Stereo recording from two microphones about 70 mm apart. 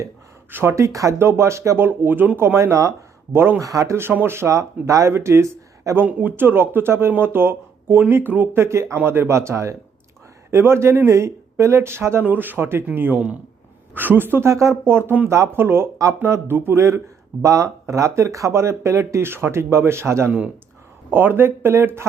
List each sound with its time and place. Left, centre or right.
0.5 s speech: right
0.9 s speech: right
1.2 s speech: right
2.6 s speech: right
3.3 s speech: right
3.6 s speech: right
3.9 s speech: right
4.4 s speech: right
5.1 s speech: right
6.1 s speech: right
8.5 s speech: right
14.5 s speech: right